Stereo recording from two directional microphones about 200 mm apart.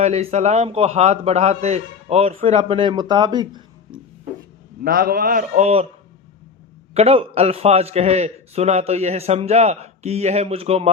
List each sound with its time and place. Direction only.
0.0 s a man's voice: 35° right (ahead or behind)
4.8 s a man's voice: 45° right (ahead or behind); by 5.9 s 30° right (ahead or behind)
6.9 s a man's voice: 30° right (ahead or behind)